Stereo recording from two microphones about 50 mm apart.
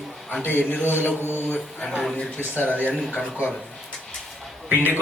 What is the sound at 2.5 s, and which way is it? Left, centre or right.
Speech, left.